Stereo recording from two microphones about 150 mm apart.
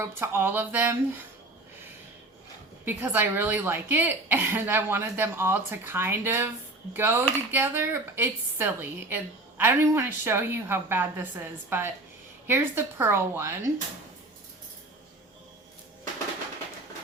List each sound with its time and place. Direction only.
0.0 s speech: 15° right (ahead or behind)
2.8 s speech: 15° right (ahead or behind)